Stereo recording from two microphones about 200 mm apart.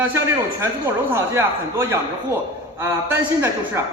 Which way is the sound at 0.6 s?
10° right (ahead or behind).